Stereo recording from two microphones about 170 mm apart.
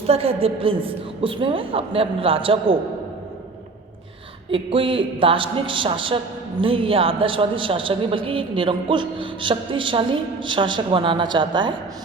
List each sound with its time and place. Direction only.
0.1 s a woman's voice: 35° right (ahead or behind)
4.5 s a woman's voice: 30° right (ahead or behind)